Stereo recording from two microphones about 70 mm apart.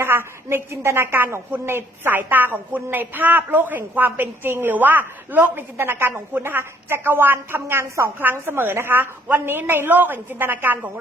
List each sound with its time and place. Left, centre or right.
0.0 s a woman's voice: right